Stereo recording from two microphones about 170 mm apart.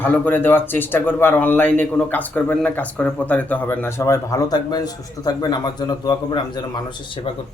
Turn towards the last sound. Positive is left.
turn(degrees=25)  # may be behind; listen again after turning